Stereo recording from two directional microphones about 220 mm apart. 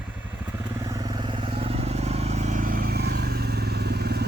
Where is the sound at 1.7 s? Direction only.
30° right (ahead or behind).